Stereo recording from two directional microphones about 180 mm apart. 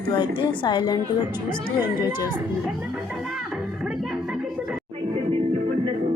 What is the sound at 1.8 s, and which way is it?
Speech, 15° right (ahead or behind).